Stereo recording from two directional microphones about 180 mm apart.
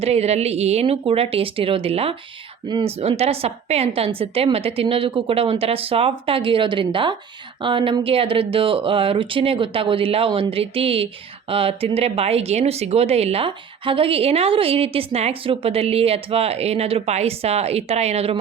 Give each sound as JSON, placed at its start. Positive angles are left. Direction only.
{"t": 0.0, "sound": "speech", "side_deg": -35}